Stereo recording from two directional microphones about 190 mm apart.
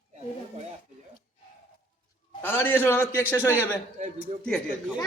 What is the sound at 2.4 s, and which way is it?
A man's voice, 10° left (ahead or behind).